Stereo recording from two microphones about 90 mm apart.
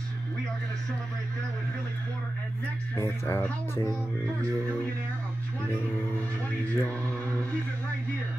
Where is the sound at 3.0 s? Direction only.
25° left (ahead or behind).